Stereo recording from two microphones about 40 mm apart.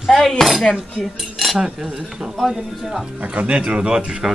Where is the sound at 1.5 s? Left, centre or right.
Centre.